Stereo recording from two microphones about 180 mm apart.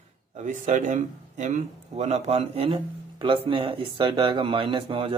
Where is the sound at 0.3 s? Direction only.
45° right (ahead or behind).